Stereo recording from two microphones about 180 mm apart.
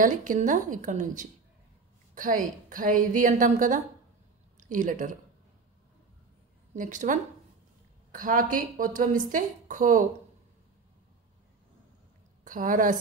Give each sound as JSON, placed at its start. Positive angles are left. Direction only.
{"t": 0.0, "sound": "a woman's voice", "side_deg": -45}
{"t": 6.7, "sound": "a woman's voice", "side_deg": -45}
{"t": 12.4, "sound": "a woman's voice", "side_deg": -45}